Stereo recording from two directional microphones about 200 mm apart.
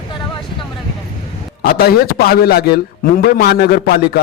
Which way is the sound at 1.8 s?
50° left (ahead or behind).